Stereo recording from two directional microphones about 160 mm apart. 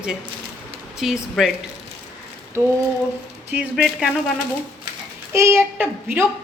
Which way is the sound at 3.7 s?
Centre (ahead or behind).